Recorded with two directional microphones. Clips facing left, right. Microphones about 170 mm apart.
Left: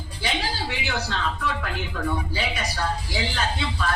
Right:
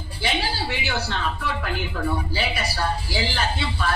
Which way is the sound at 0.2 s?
30° right (ahead or behind).